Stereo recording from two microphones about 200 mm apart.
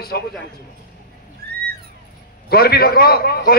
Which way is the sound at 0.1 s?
55° left (ahead or behind).